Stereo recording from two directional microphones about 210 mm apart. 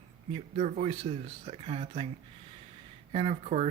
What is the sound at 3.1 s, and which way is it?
Speech, 30° right (ahead or behind).